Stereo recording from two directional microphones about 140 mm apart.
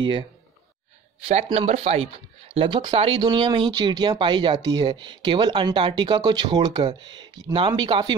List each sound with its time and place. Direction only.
0.0 s speech: 35° right (ahead or behind)
1.2 s speech: 45° right (ahead or behind)